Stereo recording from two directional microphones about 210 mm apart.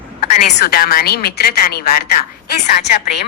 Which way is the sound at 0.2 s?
35° left (ahead or behind).